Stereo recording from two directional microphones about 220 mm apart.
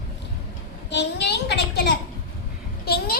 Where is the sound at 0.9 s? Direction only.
50° left (ahead or behind).